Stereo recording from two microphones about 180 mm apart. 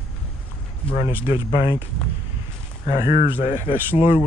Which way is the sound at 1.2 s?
30° left (ahead or behind).